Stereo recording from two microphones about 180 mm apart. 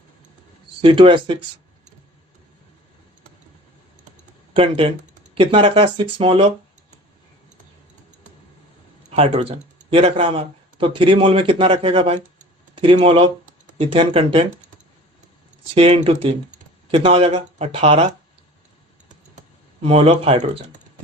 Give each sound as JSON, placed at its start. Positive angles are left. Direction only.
{"t": 0.8, "sound": "speech", "side_deg": -30}
{"t": 4.5, "sound": "speech", "side_deg": -30}
{"t": 9.0, "sound": "speech", "side_deg": -35}
{"t": 15.7, "sound": "speech", "side_deg": -35}
{"t": 19.0, "sound": "computer keyboard", "side_deg": -40}